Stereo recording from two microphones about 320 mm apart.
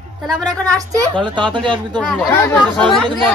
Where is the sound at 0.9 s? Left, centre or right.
Centre.